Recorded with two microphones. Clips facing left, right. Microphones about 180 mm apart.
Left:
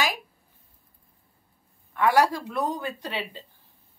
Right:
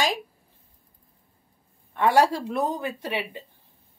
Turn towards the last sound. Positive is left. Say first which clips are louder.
# right 3 dB
turn(degrees=-20)  # may be behind; listen again after turning